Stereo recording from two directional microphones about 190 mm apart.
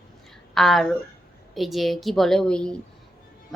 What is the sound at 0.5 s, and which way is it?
A woman's voice, centre (ahead or behind).